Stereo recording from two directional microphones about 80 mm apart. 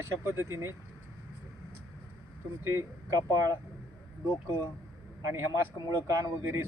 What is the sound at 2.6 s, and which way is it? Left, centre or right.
Speech, right.